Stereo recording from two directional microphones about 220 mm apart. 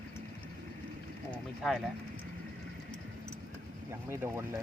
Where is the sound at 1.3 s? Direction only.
Centre (ahead or behind).